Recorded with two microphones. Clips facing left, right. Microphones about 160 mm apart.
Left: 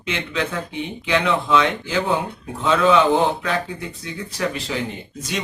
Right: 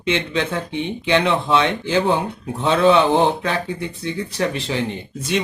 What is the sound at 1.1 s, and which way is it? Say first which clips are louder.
Speech: right 2 dB; 30° right (ahead or behind).